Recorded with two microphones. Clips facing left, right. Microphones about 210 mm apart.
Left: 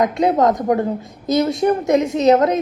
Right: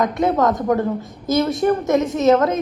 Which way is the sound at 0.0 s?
20° left (ahead or behind).